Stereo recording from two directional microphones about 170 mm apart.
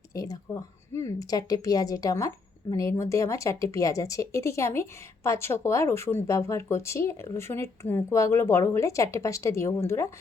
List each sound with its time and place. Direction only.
0.1 s a woman's voice: 20° left (ahead or behind)